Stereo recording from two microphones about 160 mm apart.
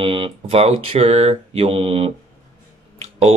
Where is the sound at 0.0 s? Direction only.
35° right (ahead or behind).